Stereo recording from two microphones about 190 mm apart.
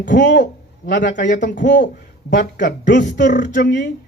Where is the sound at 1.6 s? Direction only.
65° left (ahead or behind).